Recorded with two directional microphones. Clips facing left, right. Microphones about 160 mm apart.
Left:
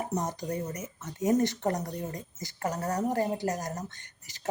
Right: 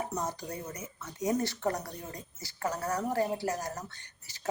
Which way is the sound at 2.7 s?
40° left (ahead or behind).